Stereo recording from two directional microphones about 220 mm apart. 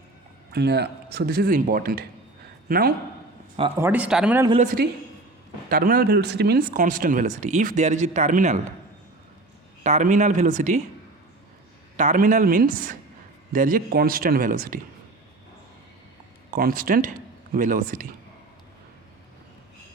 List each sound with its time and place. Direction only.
0.5 s a man's voice: 45° right (ahead or behind)
3.8 s speech: 10° right (ahead or behind)
4.4 s a woman's voice: 25° right (ahead or behind)
5.6 s speech: 40° right (ahead or behind)
9.8 s speech: 30° right (ahead or behind)
11.9 s speech: 35° right (ahead or behind)
16.5 s speech: 40° right (ahead or behind)